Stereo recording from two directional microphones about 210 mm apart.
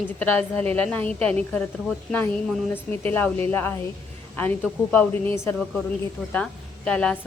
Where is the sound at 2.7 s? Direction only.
10° left (ahead or behind).